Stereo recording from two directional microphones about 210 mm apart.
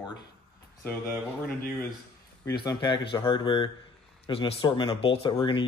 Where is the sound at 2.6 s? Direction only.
20° left (ahead or behind).